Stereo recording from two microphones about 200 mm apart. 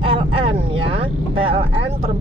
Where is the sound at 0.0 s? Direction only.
25° right (ahead or behind).